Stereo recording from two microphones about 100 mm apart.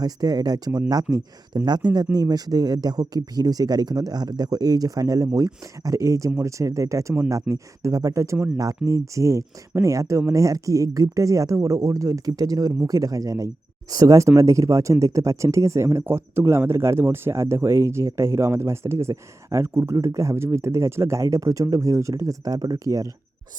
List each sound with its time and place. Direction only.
0.0 s speech: 40° right (ahead or behind)